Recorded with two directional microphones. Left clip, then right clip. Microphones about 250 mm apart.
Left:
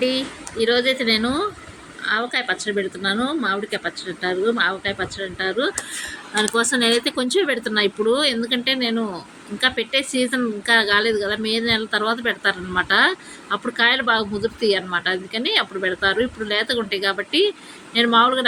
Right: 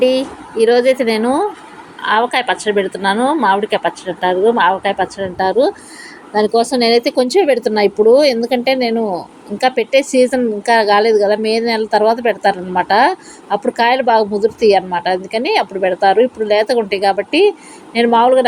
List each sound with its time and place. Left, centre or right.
0.0 s a woman's voice: centre
14.0 s a woman's voice: centre